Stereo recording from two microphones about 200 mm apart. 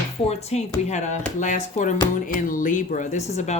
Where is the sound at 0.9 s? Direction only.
35° left (ahead or behind).